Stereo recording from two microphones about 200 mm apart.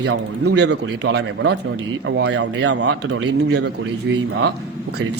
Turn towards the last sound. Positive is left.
turn(degrees=-55)  # may be behind; listen again after turning